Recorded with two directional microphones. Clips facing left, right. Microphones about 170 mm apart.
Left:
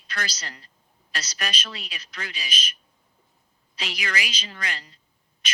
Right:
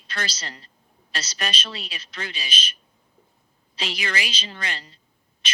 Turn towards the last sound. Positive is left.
turn(degrees=-25)  # may be behind; listen again after turning